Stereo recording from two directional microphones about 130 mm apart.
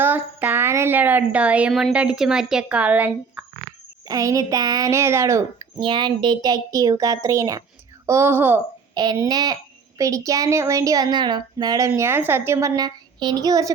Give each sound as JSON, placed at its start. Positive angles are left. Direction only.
{"t": 0.0, "sound": "a woman's voice", "side_deg": -15}
{"t": 4.0, "sound": "a woman's voice", "side_deg": -25}
{"t": 5.8, "sound": "a woman's voice", "side_deg": -35}
{"t": 9.1, "sound": "a woman's voice", "side_deg": -30}